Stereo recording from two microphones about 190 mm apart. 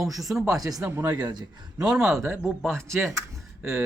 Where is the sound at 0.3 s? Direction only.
15° right (ahead or behind).